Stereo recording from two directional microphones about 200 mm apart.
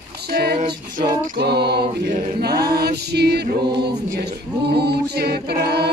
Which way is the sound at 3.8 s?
55° right (ahead or behind).